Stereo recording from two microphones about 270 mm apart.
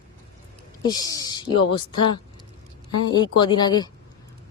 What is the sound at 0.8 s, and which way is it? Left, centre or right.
Speech, centre.